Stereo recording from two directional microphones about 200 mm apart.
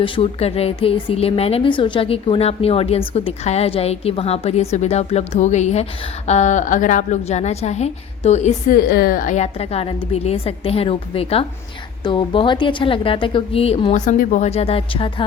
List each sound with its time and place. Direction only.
0.0 s a woman's voice: 30° left (ahead or behind)